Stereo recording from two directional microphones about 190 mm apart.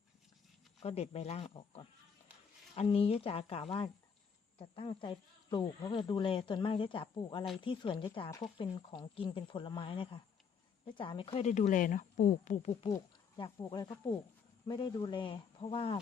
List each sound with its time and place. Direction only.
0.8 s speech: 35° left (ahead or behind)
12.9 s a sound: 25° left (ahead or behind)
13.7 s speech: 20° left (ahead or behind)